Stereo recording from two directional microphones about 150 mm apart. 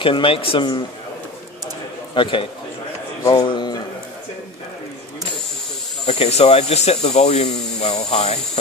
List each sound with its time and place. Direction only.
0.0 s speech: 35° left (ahead or behind)
3.3 s speech: 30° left (ahead or behind)
6.0 s speech: 45° left (ahead or behind)